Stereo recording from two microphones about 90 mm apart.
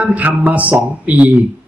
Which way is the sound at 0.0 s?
15° right (ahead or behind).